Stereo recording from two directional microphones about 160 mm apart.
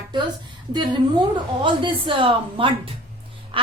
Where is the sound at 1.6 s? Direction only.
30° right (ahead or behind).